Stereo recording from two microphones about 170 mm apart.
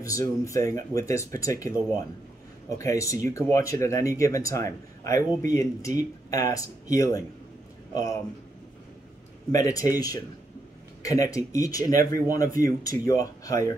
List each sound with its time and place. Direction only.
0.0 s a man's voice: 20° left (ahead or behind)
2.8 s a man's voice: 20° left (ahead or behind)
9.7 s a man's voice: 20° left (ahead or behind)